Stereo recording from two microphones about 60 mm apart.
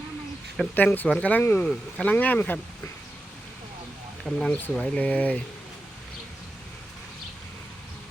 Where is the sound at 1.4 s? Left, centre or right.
Left.